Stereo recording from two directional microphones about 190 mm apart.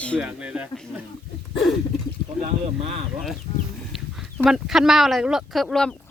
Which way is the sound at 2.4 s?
30° right (ahead or behind).